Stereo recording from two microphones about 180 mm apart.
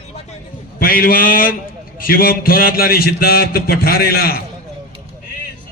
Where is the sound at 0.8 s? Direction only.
55° left (ahead or behind).